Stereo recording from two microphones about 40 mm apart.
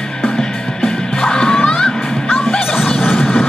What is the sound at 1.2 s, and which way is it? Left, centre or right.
Music, centre.